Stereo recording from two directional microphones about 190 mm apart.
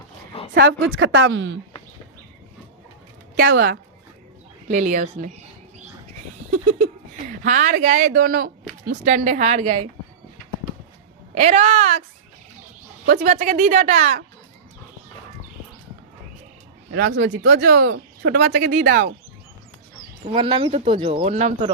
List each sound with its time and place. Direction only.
0.5 s speech: 70° right (ahead or behind)
3.3 s speech: 60° right (ahead or behind)
4.7 s speech: 40° right (ahead or behind)
7.4 s speech: 45° right (ahead or behind)
11.3 s speech: 35° right (ahead or behind)
13.3 s speech: 40° right (ahead or behind)
16.9 s speech: 60° right (ahead or behind)
20.2 s speech: 30° right (ahead or behind)